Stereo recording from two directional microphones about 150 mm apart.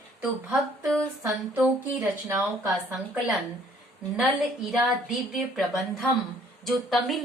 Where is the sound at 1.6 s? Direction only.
15° right (ahead or behind).